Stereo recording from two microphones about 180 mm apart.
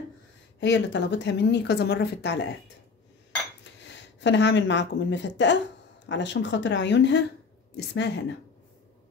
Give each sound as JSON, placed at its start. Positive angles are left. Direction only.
{"t": 0.6, "sound": "a woman's voice", "side_deg": 80}
{"t": 3.8, "sound": "a woman's voice", "side_deg": 80}